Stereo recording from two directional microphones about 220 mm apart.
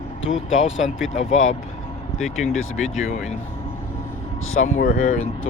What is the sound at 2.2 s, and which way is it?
Speech, centre (ahead or behind).